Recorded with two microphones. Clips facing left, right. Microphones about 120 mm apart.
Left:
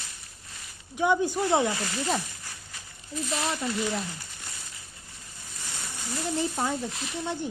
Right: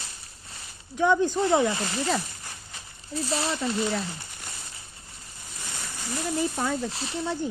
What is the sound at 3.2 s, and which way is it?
Speech, 30° right (ahead or behind).